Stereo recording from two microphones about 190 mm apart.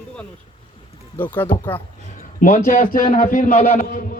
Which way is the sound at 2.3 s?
50° left (ahead or behind).